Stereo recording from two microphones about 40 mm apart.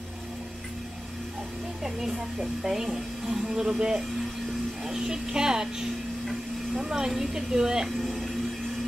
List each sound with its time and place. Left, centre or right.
2.0 s speech: centre